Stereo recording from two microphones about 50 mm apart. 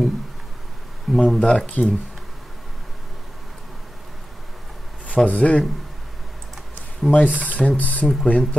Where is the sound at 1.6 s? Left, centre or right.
Left.